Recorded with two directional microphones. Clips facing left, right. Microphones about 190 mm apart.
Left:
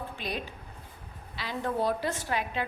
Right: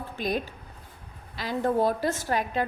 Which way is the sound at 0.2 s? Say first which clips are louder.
Right 10 dB; 45° right (ahead or behind).